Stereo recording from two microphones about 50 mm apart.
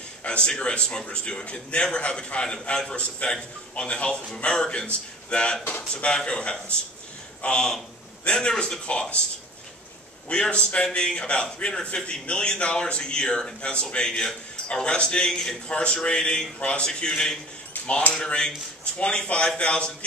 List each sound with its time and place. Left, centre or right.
0.2 s a man's voice: left
5.7 s speech: left
6.0 s a man's voice: centre
10.2 s a man's voice: left
17.8 s a sound: left
18.1 s a man's voice: centre